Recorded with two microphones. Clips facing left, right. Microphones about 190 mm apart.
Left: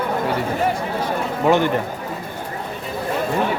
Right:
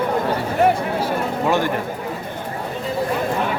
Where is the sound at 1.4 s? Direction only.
20° left (ahead or behind).